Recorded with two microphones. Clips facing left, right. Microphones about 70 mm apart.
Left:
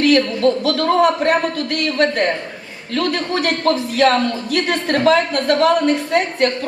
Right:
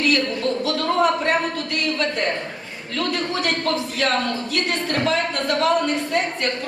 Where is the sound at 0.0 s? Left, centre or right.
Left.